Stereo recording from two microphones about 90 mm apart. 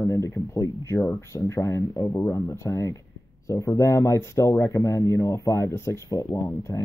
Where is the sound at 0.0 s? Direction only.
35° left (ahead or behind).